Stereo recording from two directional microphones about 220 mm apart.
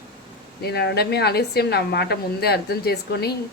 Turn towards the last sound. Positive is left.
turn(degrees=45)  # may be behind; listen again after turning